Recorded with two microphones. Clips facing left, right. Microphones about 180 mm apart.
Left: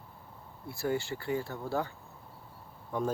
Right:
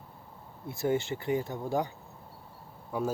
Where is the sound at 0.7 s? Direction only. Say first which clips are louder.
Right 3 dB; 20° right (ahead or behind).